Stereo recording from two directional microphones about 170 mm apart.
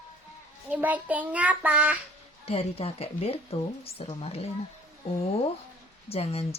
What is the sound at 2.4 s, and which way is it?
Speech, 35° left (ahead or behind).